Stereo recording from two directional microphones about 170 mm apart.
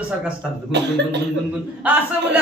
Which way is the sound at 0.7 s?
80° right.